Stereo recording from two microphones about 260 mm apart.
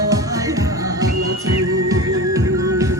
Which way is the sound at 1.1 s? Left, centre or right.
Right.